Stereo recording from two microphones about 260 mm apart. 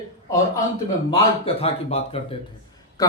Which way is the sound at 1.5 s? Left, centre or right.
Left.